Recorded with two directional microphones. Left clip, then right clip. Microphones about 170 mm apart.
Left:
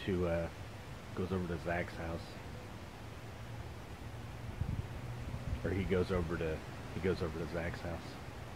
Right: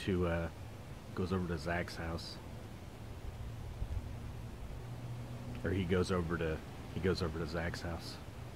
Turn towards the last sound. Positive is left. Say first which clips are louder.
# even
turn(degrees=-20)  # may be behind; listen again after turning